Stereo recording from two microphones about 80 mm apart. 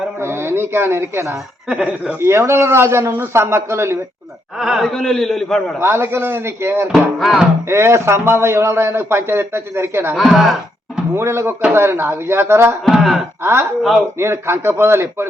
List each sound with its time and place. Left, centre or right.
0.2 s speech: right
1.6 s speech: centre
2.2 s a man's voice: right
4.5 s a man's voice: centre
5.8 s speech: right
6.9 s a man's voice: centre
7.7 s a man's voice: right
10.2 s speech: centre
11.1 s a man's voice: right
12.9 s a man's voice: centre
13.4 s a man's voice: right